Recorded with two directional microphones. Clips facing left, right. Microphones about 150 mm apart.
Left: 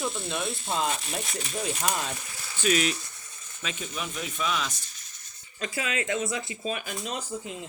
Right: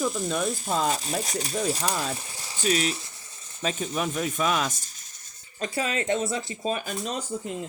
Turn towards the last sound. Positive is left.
turn(degrees=-45)  # may be behind; listen again after turning